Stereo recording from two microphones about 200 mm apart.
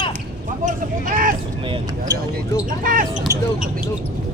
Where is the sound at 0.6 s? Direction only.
45° right (ahead or behind).